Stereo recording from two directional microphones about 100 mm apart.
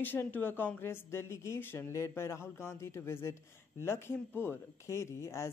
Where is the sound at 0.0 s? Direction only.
20° left (ahead or behind).